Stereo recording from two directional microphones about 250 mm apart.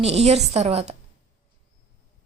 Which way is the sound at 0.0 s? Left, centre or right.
Right.